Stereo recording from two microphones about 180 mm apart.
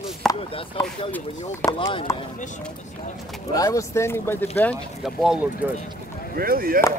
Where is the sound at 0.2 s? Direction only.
Centre (ahead or behind).